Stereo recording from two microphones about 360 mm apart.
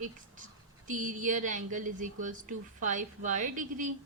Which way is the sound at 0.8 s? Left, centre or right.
Right.